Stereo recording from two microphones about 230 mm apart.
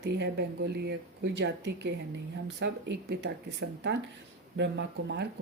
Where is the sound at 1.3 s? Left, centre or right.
Right.